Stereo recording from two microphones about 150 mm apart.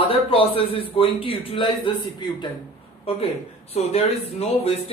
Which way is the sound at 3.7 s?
45° left (ahead or behind).